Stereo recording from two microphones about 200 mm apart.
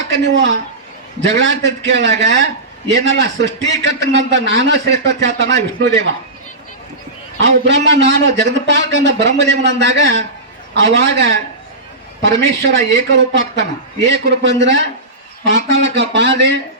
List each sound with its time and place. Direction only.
0.1 s a man's voice: 65° right (ahead or behind)
7.4 s a man's voice: 60° right (ahead or behind)